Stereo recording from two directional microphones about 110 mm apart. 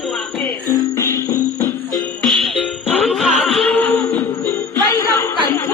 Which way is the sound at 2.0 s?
Centre (ahead or behind).